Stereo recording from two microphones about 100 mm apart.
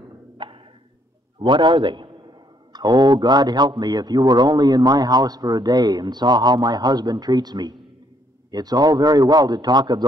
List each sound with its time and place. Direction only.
0.4 s wood block: 55° right (ahead or behind)
1.4 s a man's voice: 55° right (ahead or behind)